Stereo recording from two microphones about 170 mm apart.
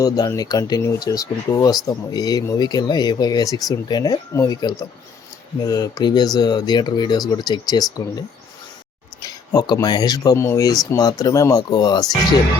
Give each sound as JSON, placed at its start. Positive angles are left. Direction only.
{"t": 0.0, "sound": "speech", "side_deg": 20}
{"t": 9.2, "sound": "speech", "side_deg": 20}